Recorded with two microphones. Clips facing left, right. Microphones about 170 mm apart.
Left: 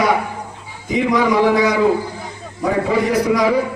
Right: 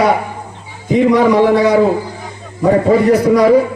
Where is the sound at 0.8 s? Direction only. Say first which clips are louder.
Right 6 dB; 45° right (ahead or behind).